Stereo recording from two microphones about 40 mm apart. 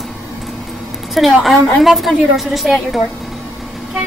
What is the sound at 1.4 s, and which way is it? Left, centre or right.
A woman's voice, centre.